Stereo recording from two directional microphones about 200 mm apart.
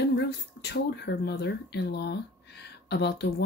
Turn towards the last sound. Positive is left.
turn(degrees=55)  # may be behind; listen again after turning